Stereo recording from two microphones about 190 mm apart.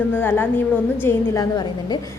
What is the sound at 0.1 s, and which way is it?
A woman's voice, 10° left (ahead or behind).